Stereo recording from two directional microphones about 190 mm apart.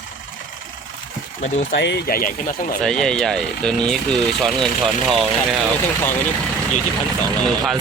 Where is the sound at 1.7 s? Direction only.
60° left (ahead or behind); by 2.7 s 45° left (ahead or behind).